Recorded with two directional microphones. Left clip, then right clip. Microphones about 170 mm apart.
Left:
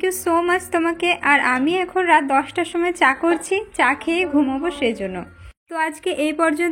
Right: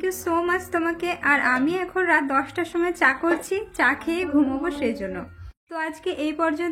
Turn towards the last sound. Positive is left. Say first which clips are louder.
# left 5 dB
turn(degrees=30)  # may be behind; listen again after turning